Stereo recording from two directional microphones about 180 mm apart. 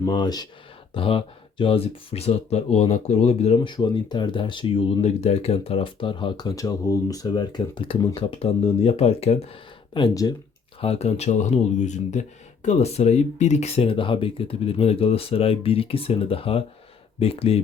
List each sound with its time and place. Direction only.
0.0 s speech: 25° left (ahead or behind)
9.9 s speech: 25° left (ahead or behind)
10.8 s speech: 35° left (ahead or behind)